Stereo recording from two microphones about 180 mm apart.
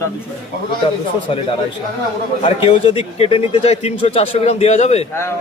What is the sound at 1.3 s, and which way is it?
A man's voice, 35° left (ahead or behind).